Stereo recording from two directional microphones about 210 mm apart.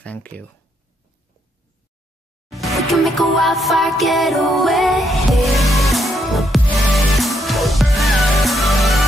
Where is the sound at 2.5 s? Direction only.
Centre (ahead or behind).